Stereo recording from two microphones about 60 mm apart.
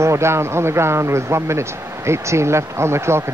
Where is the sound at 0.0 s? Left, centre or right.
Right.